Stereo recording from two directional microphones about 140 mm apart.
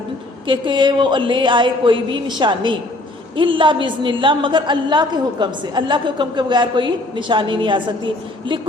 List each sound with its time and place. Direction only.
0.4 s a woman's voice: 35° right (ahead or behind)